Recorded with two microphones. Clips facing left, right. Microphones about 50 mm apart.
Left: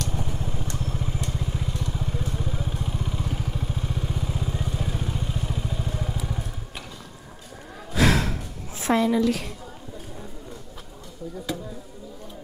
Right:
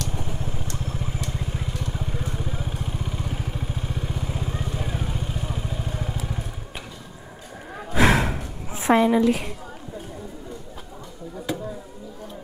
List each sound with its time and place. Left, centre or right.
0.1 s vehicle: centre
7.9 s gasp: right